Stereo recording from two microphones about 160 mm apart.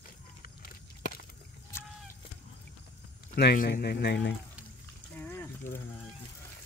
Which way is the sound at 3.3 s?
70° left (ahead or behind).